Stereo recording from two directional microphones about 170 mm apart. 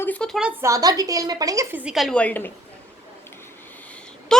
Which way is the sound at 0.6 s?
20° right (ahead or behind).